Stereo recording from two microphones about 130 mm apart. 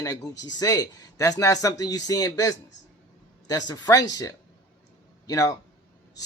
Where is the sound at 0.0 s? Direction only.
30° left (ahead or behind).